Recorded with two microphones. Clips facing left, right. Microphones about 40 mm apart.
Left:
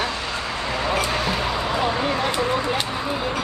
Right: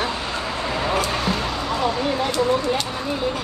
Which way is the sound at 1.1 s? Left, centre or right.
Centre.